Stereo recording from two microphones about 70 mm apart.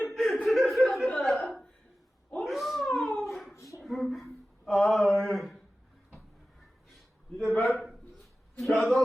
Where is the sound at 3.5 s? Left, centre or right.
Left.